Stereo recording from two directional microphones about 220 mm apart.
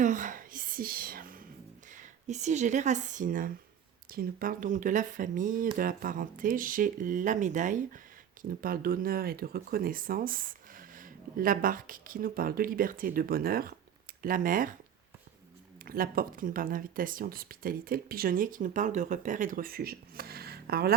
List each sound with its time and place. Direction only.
0.0 s whispering: 35° right (ahead or behind)
2.0 s speech: 30° right (ahead or behind)
15.8 s speech: 40° right (ahead or behind)